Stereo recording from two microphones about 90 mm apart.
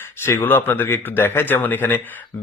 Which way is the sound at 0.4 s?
25° left (ahead or behind).